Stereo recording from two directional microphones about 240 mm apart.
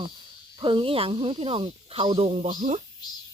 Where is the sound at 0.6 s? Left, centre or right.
Right.